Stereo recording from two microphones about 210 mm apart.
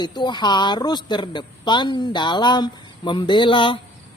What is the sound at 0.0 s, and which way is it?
Speech, 20° left (ahead or behind).